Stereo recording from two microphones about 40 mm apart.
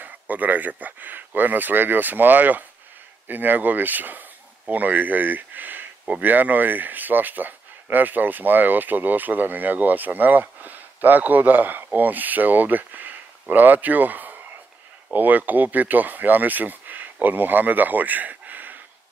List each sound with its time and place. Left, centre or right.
0.0 s speech: right